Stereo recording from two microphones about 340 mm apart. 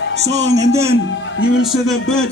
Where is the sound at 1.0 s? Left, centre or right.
Left.